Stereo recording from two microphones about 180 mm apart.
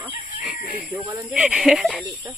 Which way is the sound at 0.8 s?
10° right (ahead or behind).